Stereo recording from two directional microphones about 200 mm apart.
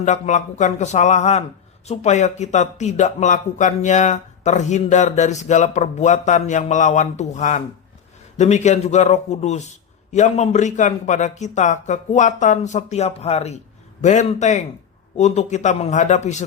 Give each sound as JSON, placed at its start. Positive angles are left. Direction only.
{"t": 0.0, "sound": "a man's voice", "side_deg": 35}